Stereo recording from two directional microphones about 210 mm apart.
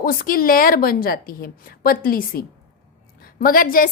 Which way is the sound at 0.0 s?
45° left (ahead or behind).